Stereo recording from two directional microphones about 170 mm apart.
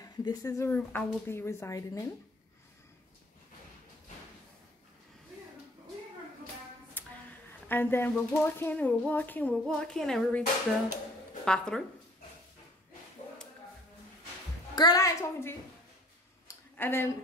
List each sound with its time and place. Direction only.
0.0 s speech: 20° left (ahead or behind)
7.6 s speech: 10° left (ahead or behind)
11.4 s speech: 5° left (ahead or behind)
14.8 s a woman's voice: 20° left (ahead or behind)
16.4 s a sound: 10° left (ahead or behind)